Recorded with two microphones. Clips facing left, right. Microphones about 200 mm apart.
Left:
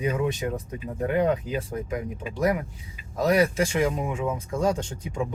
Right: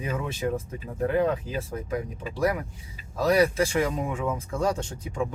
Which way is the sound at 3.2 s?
20° left (ahead or behind).